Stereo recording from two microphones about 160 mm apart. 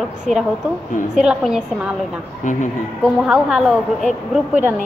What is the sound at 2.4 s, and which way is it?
Speech, 50° left (ahead or behind).